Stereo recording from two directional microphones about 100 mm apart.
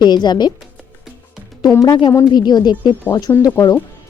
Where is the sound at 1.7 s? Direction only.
35° left (ahead or behind).